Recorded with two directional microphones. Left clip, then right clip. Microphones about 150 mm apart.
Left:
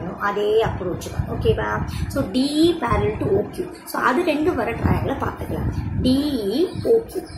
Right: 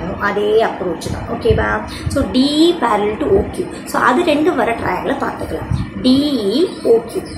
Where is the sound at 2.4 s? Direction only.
15° left (ahead or behind).